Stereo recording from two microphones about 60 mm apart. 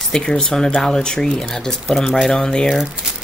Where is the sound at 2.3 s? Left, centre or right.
Centre.